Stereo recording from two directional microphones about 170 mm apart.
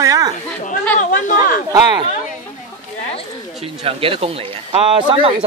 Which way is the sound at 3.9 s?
35° right (ahead or behind).